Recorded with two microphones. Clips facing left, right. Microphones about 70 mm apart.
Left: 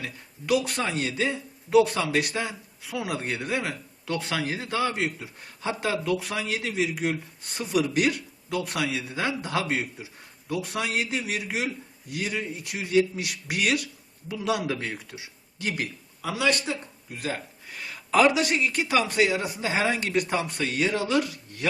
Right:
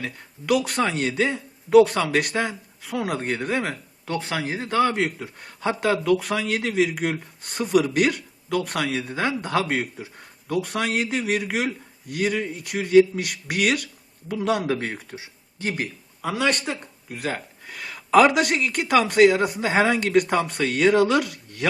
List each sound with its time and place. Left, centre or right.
0.0 s a man's voice: right
4.1 s a man's voice: right
4.7 s a man's voice: right